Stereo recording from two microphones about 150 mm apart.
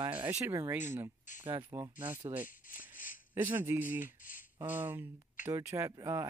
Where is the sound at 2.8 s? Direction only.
60° left (ahead or behind).